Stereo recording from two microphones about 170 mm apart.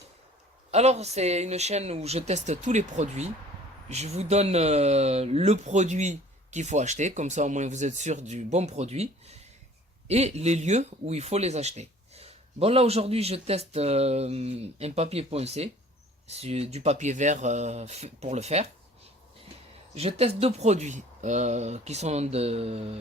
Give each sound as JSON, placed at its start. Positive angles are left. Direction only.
{"t": 0.7, "sound": "speech", "side_deg": -40}
{"t": 19.9, "sound": "speech", "side_deg": -40}